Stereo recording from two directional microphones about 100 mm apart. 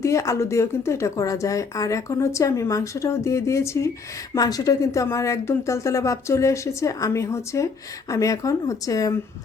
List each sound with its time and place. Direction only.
0.0 s a woman's voice: 30° left (ahead or behind)